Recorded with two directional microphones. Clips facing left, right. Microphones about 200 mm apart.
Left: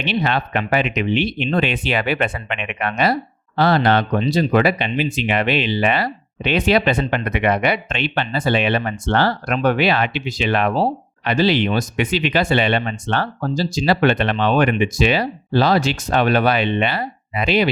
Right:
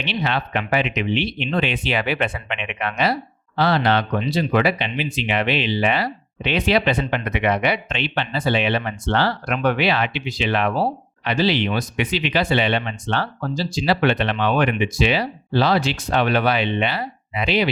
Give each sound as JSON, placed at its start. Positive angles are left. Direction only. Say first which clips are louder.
{"t": 0.0, "sound": "speech", "louder": "left 3 dB", "side_deg": 50}